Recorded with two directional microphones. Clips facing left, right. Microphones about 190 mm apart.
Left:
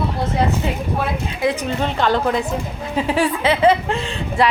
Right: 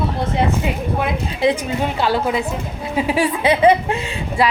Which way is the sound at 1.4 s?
10° right (ahead or behind).